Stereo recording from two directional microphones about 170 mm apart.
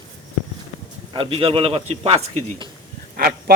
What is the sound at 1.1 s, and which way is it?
A man's voice, 30° right (ahead or behind).